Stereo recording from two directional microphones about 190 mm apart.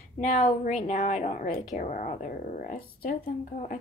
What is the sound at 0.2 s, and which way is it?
A woman's voice, 45° left (ahead or behind).